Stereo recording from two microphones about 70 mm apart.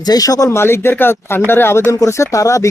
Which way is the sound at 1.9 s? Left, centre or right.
Left.